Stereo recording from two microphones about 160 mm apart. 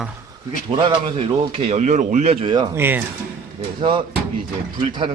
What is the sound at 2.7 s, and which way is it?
Speech, 15° right (ahead or behind).